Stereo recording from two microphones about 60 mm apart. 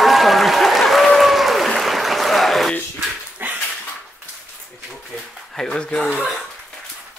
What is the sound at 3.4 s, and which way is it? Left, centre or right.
Dog, right.